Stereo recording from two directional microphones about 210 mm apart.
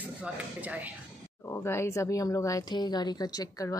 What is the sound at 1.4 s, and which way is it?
Speech, 10° left (ahead or behind).